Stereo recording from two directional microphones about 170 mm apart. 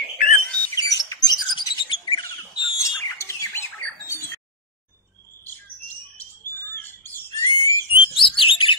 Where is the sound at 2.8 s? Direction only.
15° left (ahead or behind).